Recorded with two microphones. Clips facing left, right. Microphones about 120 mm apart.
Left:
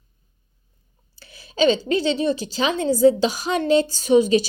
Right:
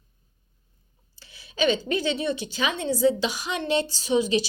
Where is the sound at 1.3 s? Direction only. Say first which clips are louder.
Left 5 dB; 40° left (ahead or behind).